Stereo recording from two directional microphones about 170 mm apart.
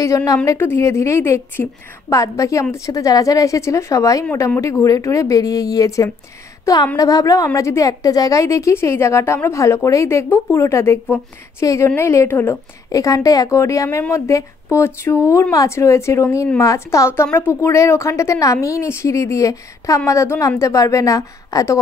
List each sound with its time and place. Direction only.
0.0 s a woman's voice: 20° left (ahead or behind)